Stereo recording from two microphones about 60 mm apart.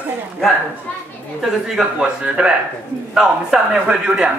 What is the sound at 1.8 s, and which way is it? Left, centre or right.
A man's voice, centre.